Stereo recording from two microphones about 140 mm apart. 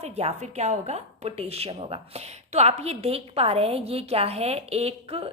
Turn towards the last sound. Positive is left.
turn(degrees=-45)  # may be behind; listen again after turning